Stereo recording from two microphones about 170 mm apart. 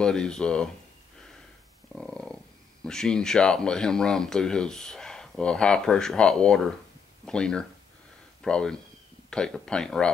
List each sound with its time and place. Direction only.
0.0 s speech: 5° left (ahead or behind)
2.0 s speech: 5° left (ahead or behind)